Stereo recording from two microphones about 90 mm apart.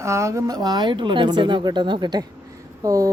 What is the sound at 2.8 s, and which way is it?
Speech, 40° right (ahead or behind).